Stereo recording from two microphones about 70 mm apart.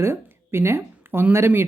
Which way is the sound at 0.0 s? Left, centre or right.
Right.